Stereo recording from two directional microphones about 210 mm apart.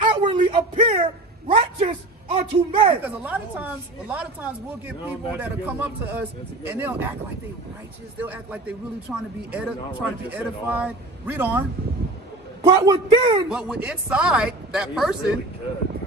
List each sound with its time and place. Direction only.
0.0 s a sound: 25° right (ahead or behind)
3.0 s speech: 5° right (ahead or behind)
8.2 s speech: 5° right (ahead or behind)
12.6 s a man's voice: 20° right (ahead or behind)
13.5 s speech: 5° right (ahead or behind)